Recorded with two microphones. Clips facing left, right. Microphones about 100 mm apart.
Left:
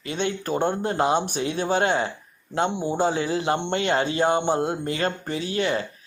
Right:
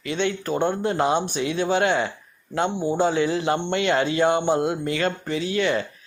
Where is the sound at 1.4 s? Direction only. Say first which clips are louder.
Right 1 dB; 40° left (ahead or behind).